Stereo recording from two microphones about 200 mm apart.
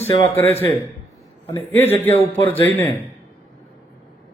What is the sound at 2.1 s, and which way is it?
Speech, 30° left (ahead or behind).